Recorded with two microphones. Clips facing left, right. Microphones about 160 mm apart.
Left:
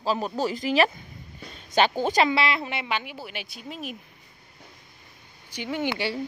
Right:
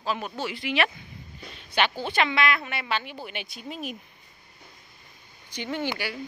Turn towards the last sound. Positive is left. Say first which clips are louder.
# left 3 dB
turn(degrees=20)  # may be behind; listen again after turning